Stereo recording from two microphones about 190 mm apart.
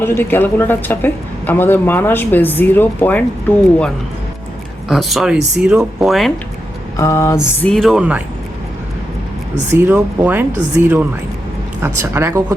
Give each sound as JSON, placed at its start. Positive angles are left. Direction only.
{"t": 0.0, "sound": "a woman's voice", "side_deg": 10}
{"t": 4.9, "sound": "speech", "side_deg": 0}
{"t": 6.9, "sound": "a woman's voice", "side_deg": 15}
{"t": 9.7, "sound": "speech", "side_deg": -10}